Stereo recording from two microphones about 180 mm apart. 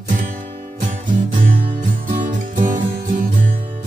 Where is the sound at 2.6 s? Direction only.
50° right (ahead or behind).